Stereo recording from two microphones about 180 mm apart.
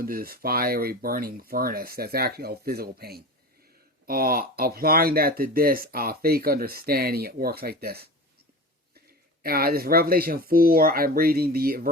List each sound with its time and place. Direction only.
0.0 s speech: 55° right (ahead or behind)
9.4 s speech: 55° right (ahead or behind)